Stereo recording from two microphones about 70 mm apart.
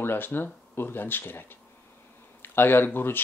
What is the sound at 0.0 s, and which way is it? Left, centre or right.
Speech, left.